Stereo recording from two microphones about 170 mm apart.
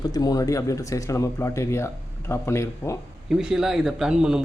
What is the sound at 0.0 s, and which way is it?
Speech, 20° left (ahead or behind).